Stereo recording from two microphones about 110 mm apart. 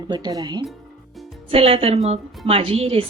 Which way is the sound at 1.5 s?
60° right (ahead or behind).